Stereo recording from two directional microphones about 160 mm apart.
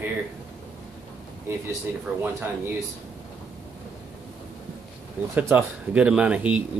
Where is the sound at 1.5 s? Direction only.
15° right (ahead or behind).